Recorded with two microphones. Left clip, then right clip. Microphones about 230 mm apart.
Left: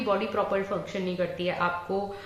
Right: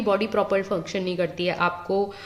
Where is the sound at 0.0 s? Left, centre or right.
Right.